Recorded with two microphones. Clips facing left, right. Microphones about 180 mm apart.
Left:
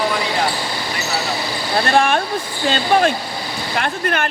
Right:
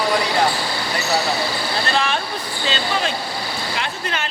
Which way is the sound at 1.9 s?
50° left (ahead or behind).